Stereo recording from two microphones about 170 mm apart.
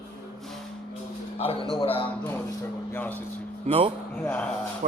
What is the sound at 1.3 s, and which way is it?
Speech, 35° left (ahead or behind).